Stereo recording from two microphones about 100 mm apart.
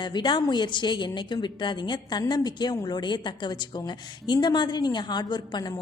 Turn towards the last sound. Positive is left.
turn(degrees=45)  # may be behind; listen again after turning